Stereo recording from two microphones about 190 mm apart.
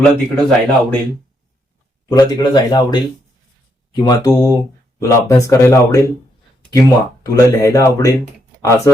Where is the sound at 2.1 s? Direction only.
20° left (ahead or behind).